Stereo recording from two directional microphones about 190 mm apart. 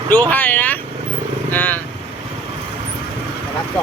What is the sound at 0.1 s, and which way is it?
Speech, 10° left (ahead or behind).